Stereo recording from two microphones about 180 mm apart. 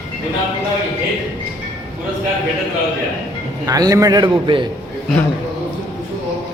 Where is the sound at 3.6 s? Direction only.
20° right (ahead or behind).